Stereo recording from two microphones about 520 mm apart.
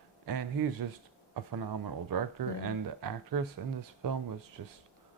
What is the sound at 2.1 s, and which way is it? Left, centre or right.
Speech, right.